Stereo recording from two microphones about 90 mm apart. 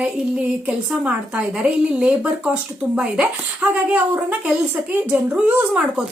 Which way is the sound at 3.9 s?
20° right (ahead or behind).